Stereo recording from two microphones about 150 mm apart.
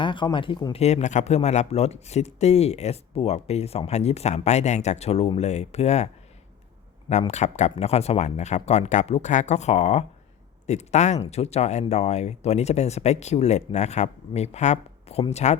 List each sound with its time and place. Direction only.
0.0 s speech: 30° left (ahead or behind)
0.8 s speech: 45° left (ahead or behind)
7.1 s speech: 50° left (ahead or behind)